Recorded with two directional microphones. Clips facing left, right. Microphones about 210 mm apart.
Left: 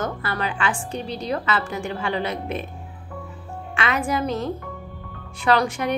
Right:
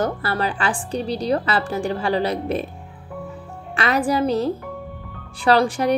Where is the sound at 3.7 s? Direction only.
35° right (ahead or behind).